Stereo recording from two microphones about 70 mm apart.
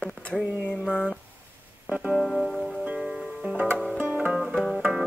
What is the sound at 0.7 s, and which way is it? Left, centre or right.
Speech, centre.